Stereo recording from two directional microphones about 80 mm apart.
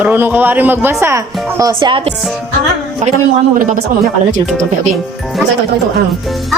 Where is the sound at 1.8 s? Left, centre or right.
Right.